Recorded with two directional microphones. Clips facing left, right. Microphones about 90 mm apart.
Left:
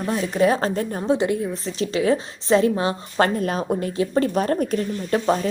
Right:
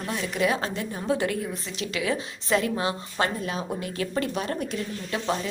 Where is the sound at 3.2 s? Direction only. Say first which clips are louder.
Left 9 dB; 45° left (ahead or behind).